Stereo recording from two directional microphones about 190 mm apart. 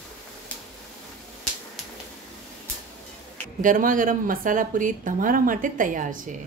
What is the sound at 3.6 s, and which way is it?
A woman's voice, 45° right (ahead or behind).